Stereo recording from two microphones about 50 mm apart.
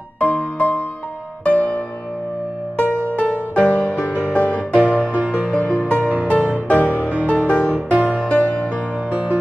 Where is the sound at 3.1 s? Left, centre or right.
Left.